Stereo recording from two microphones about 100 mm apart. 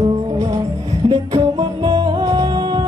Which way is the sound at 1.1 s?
55° right (ahead or behind).